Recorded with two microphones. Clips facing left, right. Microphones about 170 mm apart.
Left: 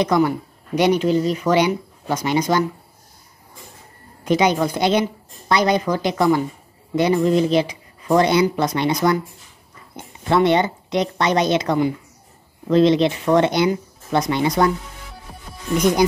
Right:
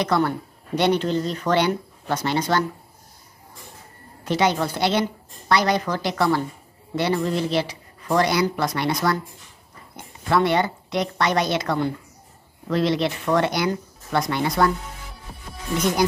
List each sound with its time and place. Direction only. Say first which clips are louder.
0.0 s speech: left 4 dB; 15° left (ahead or behind)
4.2 s speech: left 4 dB; 15° left (ahead or behind)